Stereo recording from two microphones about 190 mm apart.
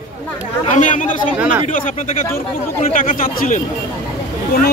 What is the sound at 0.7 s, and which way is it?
Speech, 40° left (ahead or behind).